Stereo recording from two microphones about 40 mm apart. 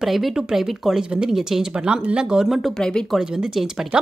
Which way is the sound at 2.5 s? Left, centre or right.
Centre.